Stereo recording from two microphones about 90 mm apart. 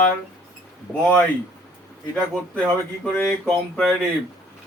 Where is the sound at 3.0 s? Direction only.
10° left (ahead or behind).